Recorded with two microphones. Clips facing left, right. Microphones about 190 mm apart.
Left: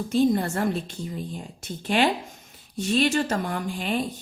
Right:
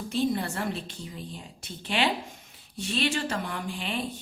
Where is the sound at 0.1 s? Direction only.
45° left (ahead or behind).